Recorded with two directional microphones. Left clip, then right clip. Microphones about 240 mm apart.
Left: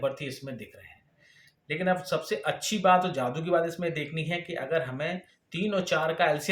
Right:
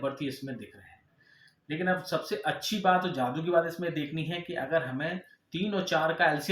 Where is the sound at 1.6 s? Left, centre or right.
Left.